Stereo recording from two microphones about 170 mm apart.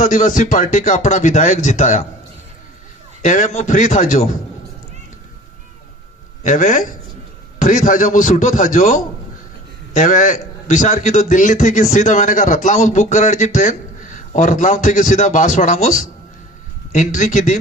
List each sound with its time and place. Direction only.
0.0 s a man's voice: 50° left (ahead or behind)
3.2 s a man's voice: 45° left (ahead or behind)
6.4 s a man's voice: 45° left (ahead or behind)